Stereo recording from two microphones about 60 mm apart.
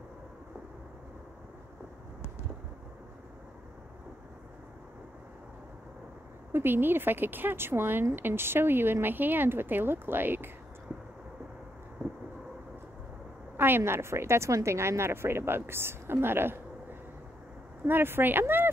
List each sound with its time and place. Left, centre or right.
6.5 s a woman's voice: right
13.6 s a woman's voice: right
17.8 s a woman's voice: right